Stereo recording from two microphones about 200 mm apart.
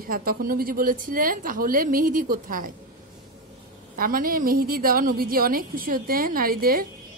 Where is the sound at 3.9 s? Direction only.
45° right (ahead or behind).